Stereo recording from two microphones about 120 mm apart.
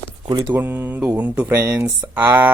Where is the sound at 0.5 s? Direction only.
15° right (ahead or behind).